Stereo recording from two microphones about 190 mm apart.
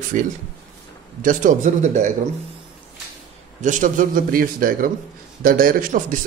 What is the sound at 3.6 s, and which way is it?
Speech, 40° right (ahead or behind).